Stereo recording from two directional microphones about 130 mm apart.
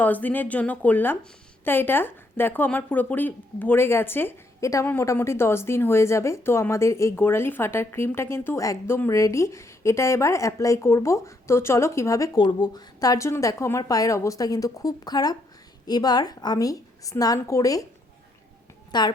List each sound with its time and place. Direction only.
0.0 s speech: 15° left (ahead or behind)
18.9 s a woman's voice: 35° left (ahead or behind)